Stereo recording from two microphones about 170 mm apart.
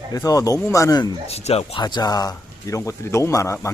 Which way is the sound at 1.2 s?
35° left (ahead or behind).